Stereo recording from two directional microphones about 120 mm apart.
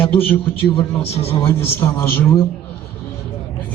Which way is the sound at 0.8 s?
55° left (ahead or behind).